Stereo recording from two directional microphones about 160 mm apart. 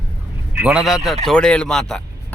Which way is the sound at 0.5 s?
5° right (ahead or behind).